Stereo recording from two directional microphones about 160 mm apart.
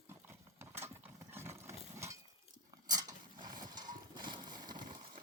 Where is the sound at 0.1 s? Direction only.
15° right (ahead or behind).